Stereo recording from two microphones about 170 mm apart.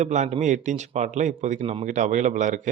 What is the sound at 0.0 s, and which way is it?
Speech, 45° right (ahead or behind).